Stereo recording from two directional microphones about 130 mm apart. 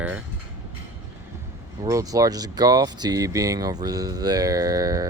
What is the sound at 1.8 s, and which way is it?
Speech, 25° right (ahead or behind).